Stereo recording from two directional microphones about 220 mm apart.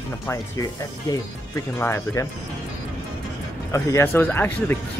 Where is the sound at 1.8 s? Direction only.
10° left (ahead or behind).